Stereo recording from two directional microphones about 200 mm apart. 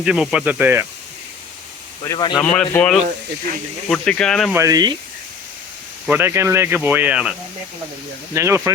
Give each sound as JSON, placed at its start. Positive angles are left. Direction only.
{"t": 0.0, "sound": "speech", "side_deg": -5}
{"t": 2.1, "sound": "a man's voice", "side_deg": 20}
{"t": 2.4, "sound": "speech", "side_deg": 5}
{"t": 4.5, "sound": "speech", "side_deg": -15}
{"t": 6.1, "sound": "speech", "side_deg": -10}